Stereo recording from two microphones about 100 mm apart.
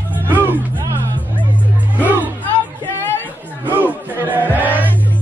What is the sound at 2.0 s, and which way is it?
Music, 15° right (ahead or behind).